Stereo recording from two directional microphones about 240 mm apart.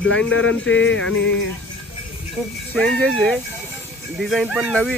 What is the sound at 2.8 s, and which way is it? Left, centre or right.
Speech, centre.